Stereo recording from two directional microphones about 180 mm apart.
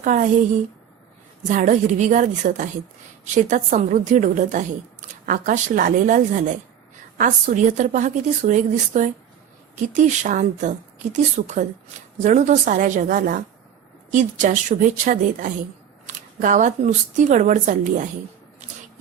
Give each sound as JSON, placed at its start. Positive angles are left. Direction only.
{"t": 0.0, "sound": "a woman's voice", "side_deg": -45}
{"t": 1.5, "sound": "speech", "side_deg": -45}